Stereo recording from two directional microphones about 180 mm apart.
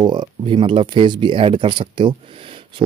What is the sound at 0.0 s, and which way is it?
Speech, 25° right (ahead or behind).